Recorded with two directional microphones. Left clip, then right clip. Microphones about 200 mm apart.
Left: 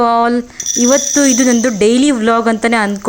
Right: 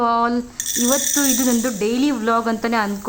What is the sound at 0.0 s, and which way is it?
Speech, 20° left (ahead or behind).